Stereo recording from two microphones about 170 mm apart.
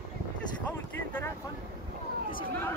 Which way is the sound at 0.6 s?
10° left (ahead or behind).